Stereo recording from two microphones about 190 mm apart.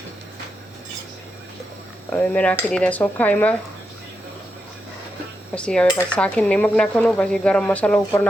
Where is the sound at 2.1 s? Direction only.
5° left (ahead or behind).